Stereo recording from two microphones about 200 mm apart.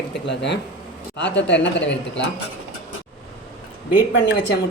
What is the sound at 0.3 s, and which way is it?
Speech, 60° left (ahead or behind).